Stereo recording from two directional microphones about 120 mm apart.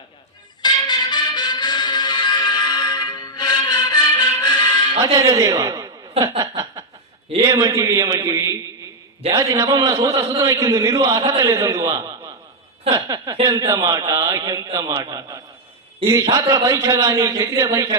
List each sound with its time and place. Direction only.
0.6 s music: 35° left (ahead or behind)
5.1 s a man's voice: 25° right (ahead or behind)
12.9 s a sound: 30° right (ahead or behind)
13.4 s a man's voice: 30° right (ahead or behind)